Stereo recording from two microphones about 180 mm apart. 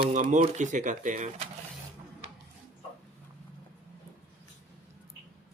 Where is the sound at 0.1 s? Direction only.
45° right (ahead or behind).